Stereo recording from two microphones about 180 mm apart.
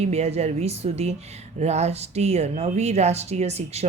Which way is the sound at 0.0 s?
35° right (ahead or behind).